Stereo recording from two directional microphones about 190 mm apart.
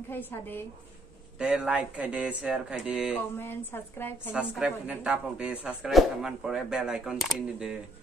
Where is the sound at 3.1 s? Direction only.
10° left (ahead or behind).